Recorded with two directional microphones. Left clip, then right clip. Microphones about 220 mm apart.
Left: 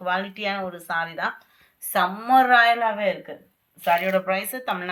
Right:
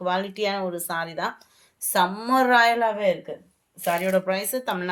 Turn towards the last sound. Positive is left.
turn(degrees=-60)  # may be behind; listen again after turning